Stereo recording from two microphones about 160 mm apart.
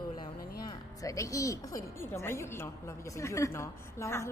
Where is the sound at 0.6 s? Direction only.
25° left (ahead or behind).